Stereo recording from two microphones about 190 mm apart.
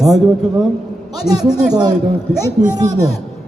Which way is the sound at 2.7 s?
20° right (ahead or behind).